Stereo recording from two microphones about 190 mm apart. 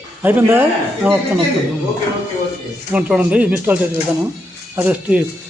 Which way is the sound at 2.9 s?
10° right (ahead or behind).